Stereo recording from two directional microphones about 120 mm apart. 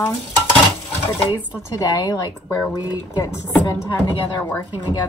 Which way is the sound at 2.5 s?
15° left (ahead or behind).